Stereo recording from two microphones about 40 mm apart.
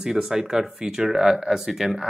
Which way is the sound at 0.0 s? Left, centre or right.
Centre.